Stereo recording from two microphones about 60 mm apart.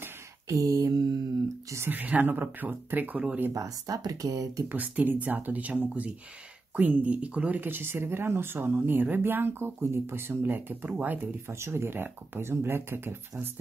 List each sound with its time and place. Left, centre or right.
0.5 s mantra: right
1.9 s speech: right
3.5 s speech: right
4.6 s speech: right
11.4 s speech: right